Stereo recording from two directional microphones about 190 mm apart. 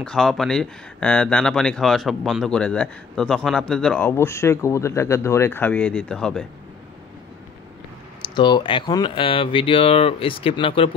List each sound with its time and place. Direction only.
0.0 s speech: 5° left (ahead or behind)
8.4 s speech: 25° left (ahead or behind)